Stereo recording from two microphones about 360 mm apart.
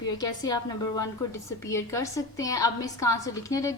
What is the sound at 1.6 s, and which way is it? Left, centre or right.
A woman's voice, centre.